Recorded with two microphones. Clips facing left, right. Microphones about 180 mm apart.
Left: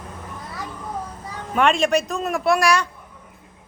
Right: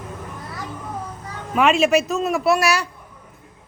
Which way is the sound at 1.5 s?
5° right (ahead or behind).